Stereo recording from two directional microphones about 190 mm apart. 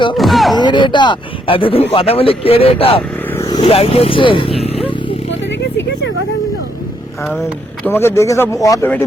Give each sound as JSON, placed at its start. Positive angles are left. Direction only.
{"t": 0.2, "sound": "speech", "side_deg": 0}
{"t": 0.6, "sound": "speech", "side_deg": 25}
{"t": 4.6, "sound": "a sound", "side_deg": 30}
{"t": 7.9, "sound": "a man's voice", "side_deg": 10}